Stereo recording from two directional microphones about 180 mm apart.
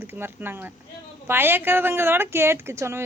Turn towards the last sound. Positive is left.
turn(degrees=-15)  # may be behind; listen again after turning